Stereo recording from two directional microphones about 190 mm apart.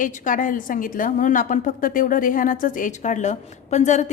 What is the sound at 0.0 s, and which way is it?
A woman's voice, 45° left (ahead or behind).